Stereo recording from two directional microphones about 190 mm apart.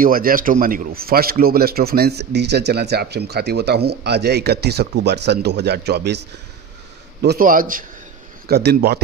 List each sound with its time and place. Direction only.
0.0 s a man's voice: 50° right (ahead or behind)
8.5 s a man's voice: 60° right (ahead or behind)